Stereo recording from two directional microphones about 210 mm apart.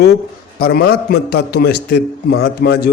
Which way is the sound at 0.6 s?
50° left (ahead or behind).